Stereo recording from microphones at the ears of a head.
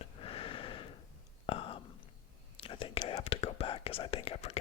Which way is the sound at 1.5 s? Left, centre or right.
Left.